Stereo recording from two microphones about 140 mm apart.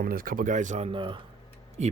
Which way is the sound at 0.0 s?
90° right.